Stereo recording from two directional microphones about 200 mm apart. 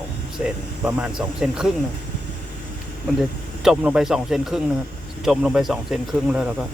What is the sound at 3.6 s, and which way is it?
Speech, 5° right (ahead or behind).